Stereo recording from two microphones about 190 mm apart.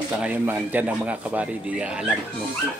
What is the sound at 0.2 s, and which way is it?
A man's voice, 5° right (ahead or behind).